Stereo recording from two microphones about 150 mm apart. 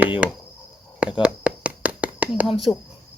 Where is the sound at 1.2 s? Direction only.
10° right (ahead or behind).